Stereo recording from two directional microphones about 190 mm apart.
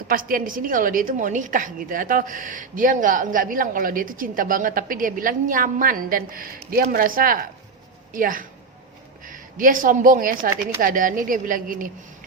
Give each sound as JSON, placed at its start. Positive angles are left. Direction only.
{"t": 0.1, "sound": "a woman's voice", "side_deg": -50}